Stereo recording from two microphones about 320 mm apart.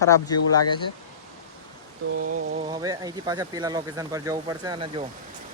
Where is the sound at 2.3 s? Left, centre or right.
Right.